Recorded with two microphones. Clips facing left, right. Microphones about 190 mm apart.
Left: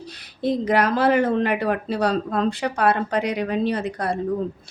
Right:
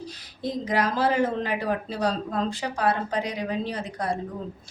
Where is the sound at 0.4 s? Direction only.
65° left (ahead or behind).